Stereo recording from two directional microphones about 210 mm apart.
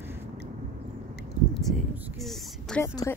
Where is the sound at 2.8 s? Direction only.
10° left (ahead or behind).